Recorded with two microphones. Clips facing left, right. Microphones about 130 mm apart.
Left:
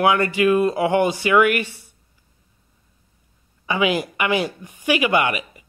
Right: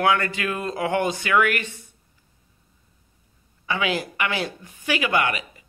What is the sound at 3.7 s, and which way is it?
Speech, 15° left (ahead or behind).